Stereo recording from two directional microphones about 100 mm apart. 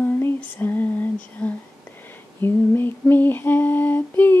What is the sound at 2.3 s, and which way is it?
Lullaby, 20° left (ahead or behind).